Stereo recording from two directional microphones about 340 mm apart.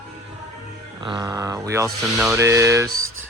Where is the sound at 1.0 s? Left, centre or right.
Centre.